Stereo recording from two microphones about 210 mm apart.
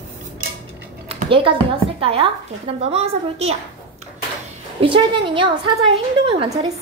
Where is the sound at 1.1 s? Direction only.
25° right (ahead or behind).